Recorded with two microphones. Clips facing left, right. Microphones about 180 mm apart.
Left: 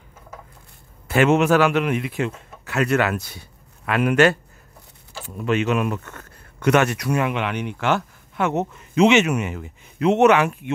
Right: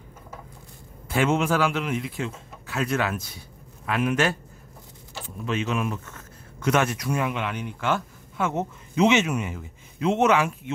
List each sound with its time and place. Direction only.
1.0 s a man's voice: 70° left (ahead or behind)
5.4 s speech: 65° left (ahead or behind)